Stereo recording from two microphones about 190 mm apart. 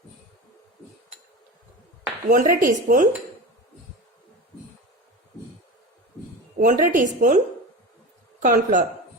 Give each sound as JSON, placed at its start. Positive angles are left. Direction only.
{"t": 2.3, "sound": "a woman's voice", "side_deg": -50}
{"t": 6.6, "sound": "a woman's voice", "side_deg": -45}